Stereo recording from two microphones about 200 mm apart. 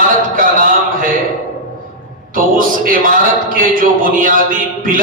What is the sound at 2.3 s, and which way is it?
Speech, 45° right (ahead or behind).